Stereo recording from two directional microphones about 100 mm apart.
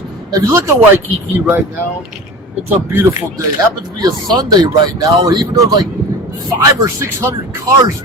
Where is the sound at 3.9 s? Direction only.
45° right (ahead or behind).